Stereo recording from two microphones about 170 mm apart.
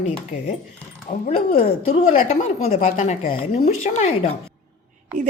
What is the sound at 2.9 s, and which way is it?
Speech, 45° left (ahead or behind).